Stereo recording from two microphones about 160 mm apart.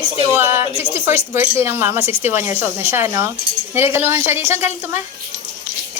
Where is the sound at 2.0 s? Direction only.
40° left (ahead or behind).